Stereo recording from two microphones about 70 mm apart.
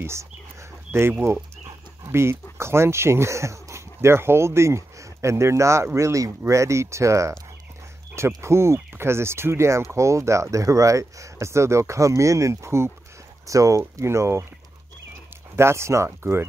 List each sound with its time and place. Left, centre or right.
0.0 s a sound: right
2.0 s speech: right
8.4 s speech: right
13.5 s speech: right
15.5 s speech: right